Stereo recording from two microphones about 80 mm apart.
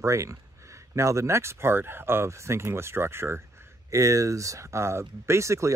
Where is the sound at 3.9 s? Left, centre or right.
Right.